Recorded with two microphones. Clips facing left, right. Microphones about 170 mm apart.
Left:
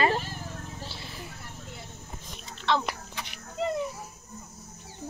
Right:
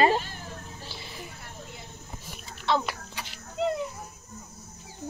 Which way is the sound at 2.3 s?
5° right (ahead or behind).